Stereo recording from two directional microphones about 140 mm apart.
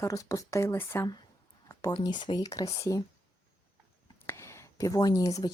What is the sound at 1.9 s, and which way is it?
Speech, 35° left (ahead or behind).